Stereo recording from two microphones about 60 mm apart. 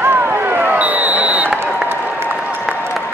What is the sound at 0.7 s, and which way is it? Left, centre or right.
Basketball bounce, right.